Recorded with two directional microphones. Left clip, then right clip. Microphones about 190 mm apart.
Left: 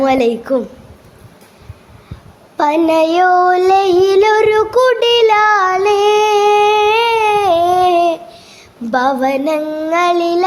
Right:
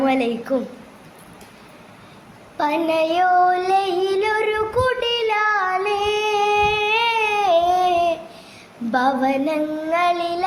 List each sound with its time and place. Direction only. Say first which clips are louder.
0.0 s a woman's voice: left 7 dB; 45° left (ahead or behind)
2.6 s child singing: left 8 dB; 40° left (ahead or behind)